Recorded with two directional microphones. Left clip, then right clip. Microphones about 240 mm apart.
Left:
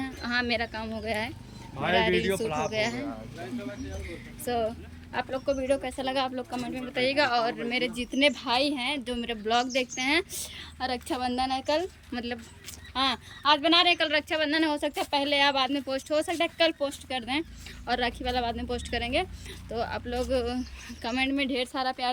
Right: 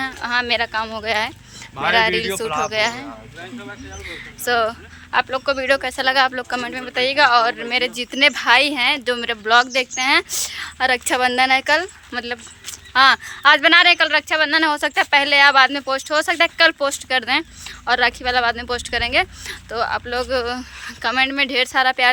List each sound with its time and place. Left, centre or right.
0.0 s speech: centre
6.0 s speech: right
6.8 s speech: centre
8.3 s speech: right
9.1 s speech: centre
10.6 s speech: right
12.1 s speech: centre
13.2 s speech: right
13.8 s speech: centre
16.2 s speech: right
17.8 s speech: centre
19.1 s speech: right
19.7 s speech: centre
21.4 s speech: right